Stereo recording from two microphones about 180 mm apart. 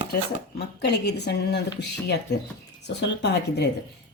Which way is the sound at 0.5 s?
65° left (ahead or behind).